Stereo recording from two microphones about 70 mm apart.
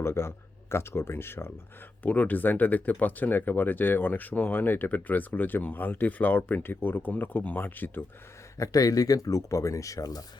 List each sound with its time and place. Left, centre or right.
0.0 s speech: left
8.5 s speech: left